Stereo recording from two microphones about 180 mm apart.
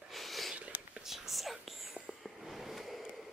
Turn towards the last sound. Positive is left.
turn(degrees=0)  # may be behind; listen again after turning